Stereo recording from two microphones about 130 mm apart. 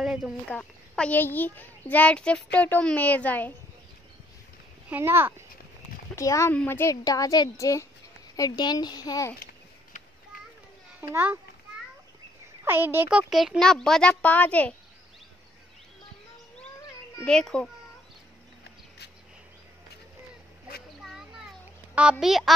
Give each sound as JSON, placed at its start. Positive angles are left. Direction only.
{"t": 0.0, "sound": "a sound", "side_deg": -5}
{"t": 0.5, "sound": "a child's voice", "side_deg": 10}
{"t": 4.8, "sound": "a child's voice", "side_deg": -15}
{"t": 6.1, "sound": "speech", "side_deg": 25}
{"t": 11.0, "sound": "a child's voice", "side_deg": -15}
{"t": 12.6, "sound": "a child's voice", "side_deg": -15}
{"t": 13.3, "sound": "a child's voice", "side_deg": 0}
{"t": 17.2, "sound": "a child's voice", "side_deg": 5}
{"t": 21.0, "sound": "a sound", "side_deg": 0}
{"t": 22.2, "sound": "a child's voice", "side_deg": 0}